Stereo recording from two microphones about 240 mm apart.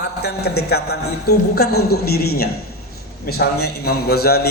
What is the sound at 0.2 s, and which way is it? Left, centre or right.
A man's voice, left.